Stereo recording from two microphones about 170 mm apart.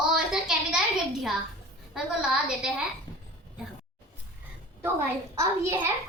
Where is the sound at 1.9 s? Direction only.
5° right (ahead or behind).